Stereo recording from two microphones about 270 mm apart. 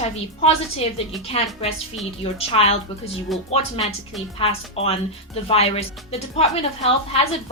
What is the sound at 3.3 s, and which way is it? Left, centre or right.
Speech, centre.